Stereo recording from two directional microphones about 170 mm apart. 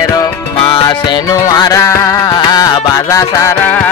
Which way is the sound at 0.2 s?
25° left (ahead or behind).